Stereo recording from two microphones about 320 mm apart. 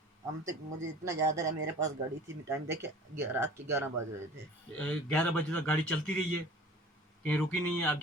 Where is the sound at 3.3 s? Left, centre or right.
Centre.